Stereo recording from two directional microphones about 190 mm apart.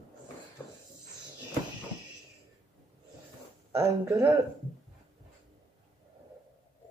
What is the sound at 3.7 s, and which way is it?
Speech, 15° right (ahead or behind).